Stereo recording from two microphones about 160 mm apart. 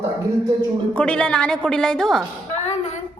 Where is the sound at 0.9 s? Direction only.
5° left (ahead or behind).